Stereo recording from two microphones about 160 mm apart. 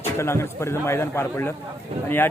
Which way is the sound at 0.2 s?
15° left (ahead or behind).